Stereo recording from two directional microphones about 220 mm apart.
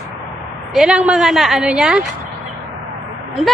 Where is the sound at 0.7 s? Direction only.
5° right (ahead or behind).